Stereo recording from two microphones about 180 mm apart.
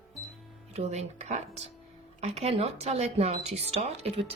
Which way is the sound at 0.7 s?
35° right (ahead or behind).